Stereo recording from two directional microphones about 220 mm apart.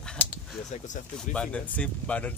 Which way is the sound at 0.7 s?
35° left (ahead or behind).